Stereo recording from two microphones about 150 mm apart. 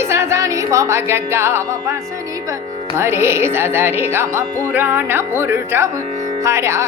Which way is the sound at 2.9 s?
15° right (ahead or behind).